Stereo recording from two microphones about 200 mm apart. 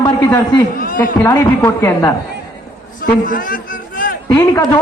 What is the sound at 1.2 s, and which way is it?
Speech, 10° left (ahead or behind).